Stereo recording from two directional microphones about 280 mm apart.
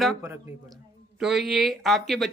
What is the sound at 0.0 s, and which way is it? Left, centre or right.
Speech, centre.